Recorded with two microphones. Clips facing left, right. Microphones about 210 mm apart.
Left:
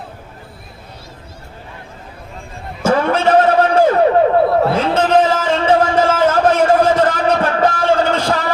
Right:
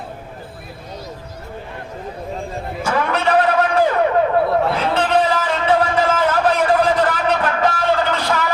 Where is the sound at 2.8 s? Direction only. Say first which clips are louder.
Left 6 dB; 40° left (ahead or behind).